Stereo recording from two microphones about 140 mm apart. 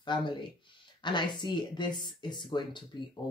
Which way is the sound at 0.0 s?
35° left (ahead or behind).